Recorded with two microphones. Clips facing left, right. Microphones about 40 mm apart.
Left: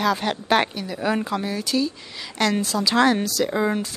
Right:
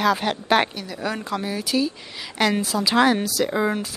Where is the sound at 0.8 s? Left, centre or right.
Centre.